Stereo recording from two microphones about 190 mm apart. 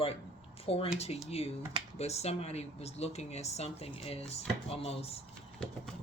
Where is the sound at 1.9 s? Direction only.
35° left (ahead or behind).